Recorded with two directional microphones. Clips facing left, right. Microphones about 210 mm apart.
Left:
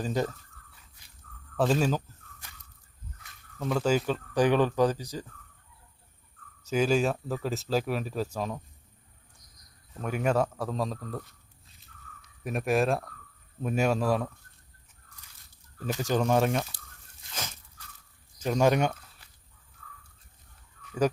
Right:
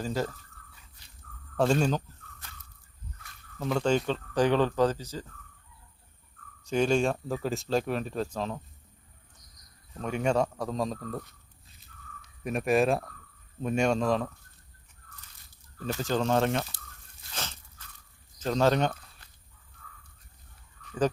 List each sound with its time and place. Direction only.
0.0 s speech: 20° left (ahead or behind)
1.5 s speech: 5° left (ahead or behind)
3.6 s speech: centre (ahead or behind)
6.7 s speech: 5° left (ahead or behind)
9.9 s speech: 5° left (ahead or behind)
12.4 s speech: centre (ahead or behind)
15.9 s speech: 15° left (ahead or behind)
17.3 s crunch: 10° left (ahead or behind)
18.3 s speech: 10° left (ahead or behind)